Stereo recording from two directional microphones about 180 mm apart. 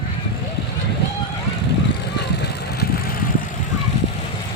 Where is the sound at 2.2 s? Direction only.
65° left (ahead or behind).